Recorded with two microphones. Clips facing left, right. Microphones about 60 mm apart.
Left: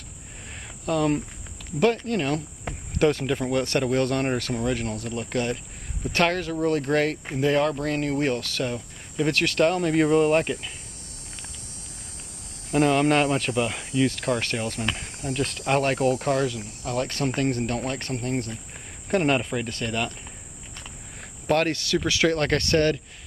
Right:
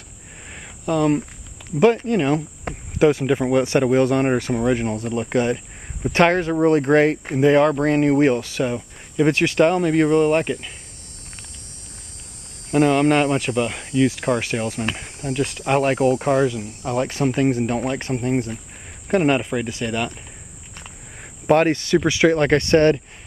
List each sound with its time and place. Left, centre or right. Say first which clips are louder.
0.8 s speech: right 5 dB; centre
1.8 s speech: right 6 dB; centre
9.8 s speech: right 3 dB; centre
12.7 s speech: right 4 dB; centre
21.5 s speech: right 7 dB; right